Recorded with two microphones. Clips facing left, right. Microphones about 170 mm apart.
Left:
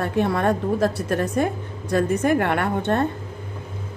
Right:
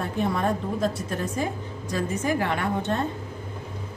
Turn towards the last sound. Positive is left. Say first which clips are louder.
# left 4 dB
turn(degrees=60)  # may be behind; listen again after turning